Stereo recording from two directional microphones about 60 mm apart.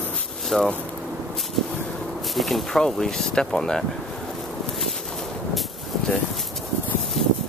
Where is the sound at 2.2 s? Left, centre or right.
Centre.